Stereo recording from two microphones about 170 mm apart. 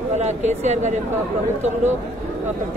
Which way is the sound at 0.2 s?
40° right (ahead or behind).